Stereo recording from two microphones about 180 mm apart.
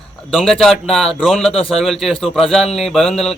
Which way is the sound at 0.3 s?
Centre (ahead or behind).